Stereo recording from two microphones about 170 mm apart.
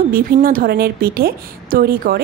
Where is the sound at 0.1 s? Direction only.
55° right (ahead or behind).